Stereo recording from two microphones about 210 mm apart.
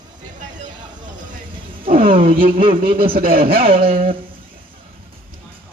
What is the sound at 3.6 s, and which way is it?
Speech, 25° right (ahead or behind).